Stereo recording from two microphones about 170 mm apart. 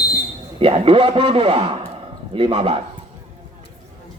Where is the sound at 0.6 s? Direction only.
35° right (ahead or behind).